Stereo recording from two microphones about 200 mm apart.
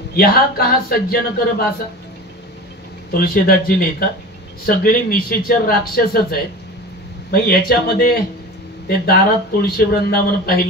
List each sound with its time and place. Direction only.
0.1 s speech: 50° left (ahead or behind)
3.1 s speech: 50° left (ahead or behind)